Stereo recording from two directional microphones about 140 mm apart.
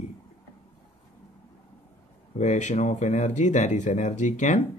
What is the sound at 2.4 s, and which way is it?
Speech, 55° left (ahead or behind).